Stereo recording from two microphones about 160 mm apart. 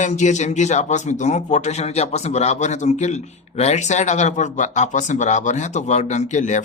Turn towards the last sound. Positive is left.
turn(degrees=50)  # may be behind; listen again after turning